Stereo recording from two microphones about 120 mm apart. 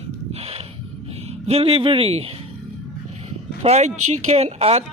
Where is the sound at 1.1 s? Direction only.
60° right (ahead or behind).